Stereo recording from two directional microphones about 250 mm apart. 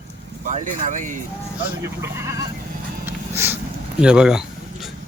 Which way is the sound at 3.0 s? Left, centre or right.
Centre.